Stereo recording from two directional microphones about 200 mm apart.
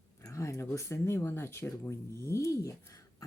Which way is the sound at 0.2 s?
15° left (ahead or behind).